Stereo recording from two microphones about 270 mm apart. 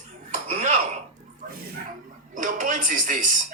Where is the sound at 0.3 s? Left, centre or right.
Right.